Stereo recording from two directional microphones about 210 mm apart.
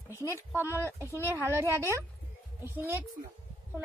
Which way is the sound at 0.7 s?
10° left (ahead or behind).